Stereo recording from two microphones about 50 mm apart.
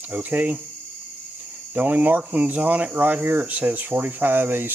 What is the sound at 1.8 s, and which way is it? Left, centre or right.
Speech, right.